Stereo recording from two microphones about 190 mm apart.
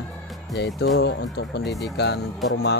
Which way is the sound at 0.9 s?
60° left (ahead or behind).